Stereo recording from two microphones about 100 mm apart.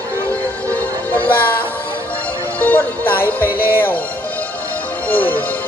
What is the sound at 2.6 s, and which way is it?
Music, 15° left (ahead or behind).